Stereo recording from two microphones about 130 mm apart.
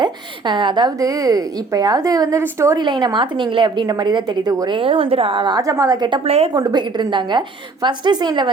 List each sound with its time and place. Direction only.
0.0 s a woman's voice: 40° right (ahead or behind); by 2.7 s 20° right (ahead or behind)
2.7 s a woman's voice: 35° right (ahead or behind)
6.2 s a woman's voice: 50° right (ahead or behind)
6.5 s a woman's voice: 30° right (ahead or behind)